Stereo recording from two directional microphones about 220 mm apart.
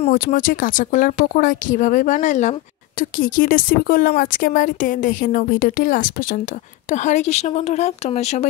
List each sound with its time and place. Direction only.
0.1 s speech: 40° left (ahead or behind)